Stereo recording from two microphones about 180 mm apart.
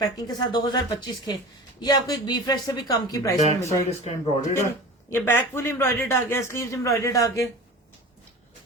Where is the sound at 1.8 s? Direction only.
20° left (ahead or behind).